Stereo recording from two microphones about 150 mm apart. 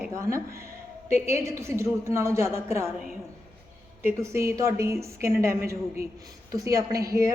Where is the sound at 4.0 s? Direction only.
15° right (ahead or behind).